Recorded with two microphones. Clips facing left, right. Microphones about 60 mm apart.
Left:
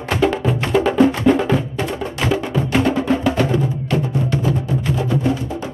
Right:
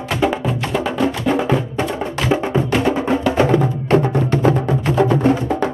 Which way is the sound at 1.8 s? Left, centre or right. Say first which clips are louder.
Right 1 dB; right.